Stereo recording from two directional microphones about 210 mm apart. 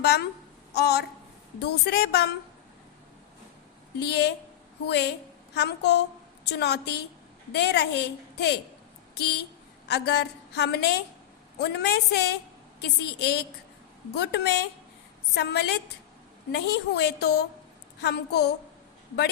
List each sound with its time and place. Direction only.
0.0 s a woman's voice: 50° left (ahead or behind)
4.0 s a woman's voice: 50° left (ahead or behind)